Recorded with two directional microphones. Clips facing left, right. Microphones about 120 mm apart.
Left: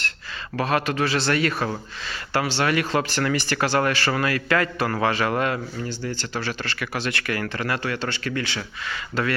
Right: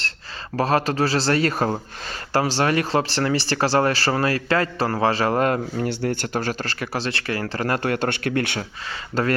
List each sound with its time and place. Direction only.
0.5 s speech: 35° right (ahead or behind)
5.8 s speech: 65° right (ahead or behind)
8.9 s speech: 40° right (ahead or behind)